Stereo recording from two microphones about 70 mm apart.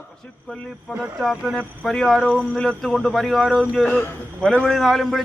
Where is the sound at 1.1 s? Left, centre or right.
Centre.